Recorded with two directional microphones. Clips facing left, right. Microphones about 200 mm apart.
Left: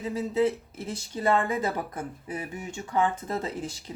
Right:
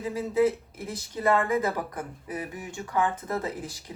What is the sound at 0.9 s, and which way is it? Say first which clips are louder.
Speech: right 1 dB; 30° left (ahead or behind).